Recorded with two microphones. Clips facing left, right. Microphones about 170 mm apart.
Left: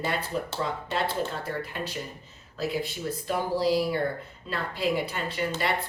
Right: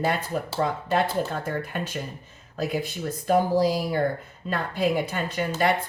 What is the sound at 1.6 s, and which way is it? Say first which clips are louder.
Speech: right 3 dB; 50° right (ahead or behind).